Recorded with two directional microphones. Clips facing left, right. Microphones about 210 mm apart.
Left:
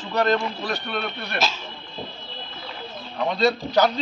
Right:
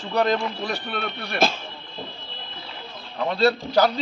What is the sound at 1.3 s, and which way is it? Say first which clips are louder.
Speech: right 5 dB; 55° right (ahead or behind).